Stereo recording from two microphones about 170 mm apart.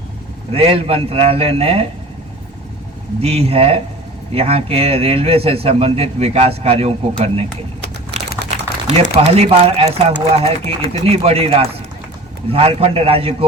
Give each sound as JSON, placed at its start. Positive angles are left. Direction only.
{"t": 0.5, "sound": "speech", "side_deg": -35}
{"t": 3.2, "sound": "speech", "side_deg": -35}
{"t": 8.1, "sound": "typing", "side_deg": -40}
{"t": 8.4, "sound": "speech", "side_deg": -40}